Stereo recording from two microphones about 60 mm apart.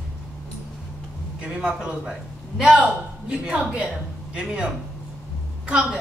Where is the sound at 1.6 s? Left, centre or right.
Centre.